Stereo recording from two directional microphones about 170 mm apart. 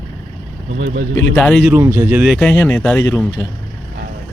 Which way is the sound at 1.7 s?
15° right (ahead or behind).